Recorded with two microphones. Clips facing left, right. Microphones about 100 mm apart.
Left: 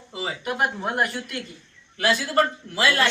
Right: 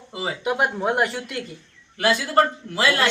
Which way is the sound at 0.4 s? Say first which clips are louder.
Right 3 dB; 85° right.